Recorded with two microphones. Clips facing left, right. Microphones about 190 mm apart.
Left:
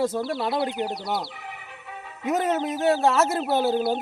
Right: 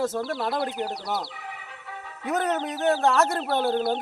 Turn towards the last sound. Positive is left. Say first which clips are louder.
# left 2 dB
turn(degrees=5)  # may be behind; listen again after turning